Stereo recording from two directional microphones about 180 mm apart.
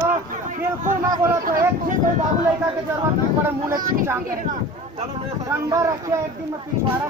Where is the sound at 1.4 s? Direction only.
50° right (ahead or behind).